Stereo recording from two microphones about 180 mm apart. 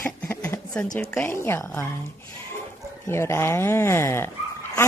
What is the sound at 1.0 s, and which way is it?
Speech, 10° left (ahead or behind).